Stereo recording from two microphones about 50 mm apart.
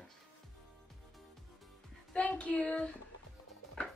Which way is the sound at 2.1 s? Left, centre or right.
Left.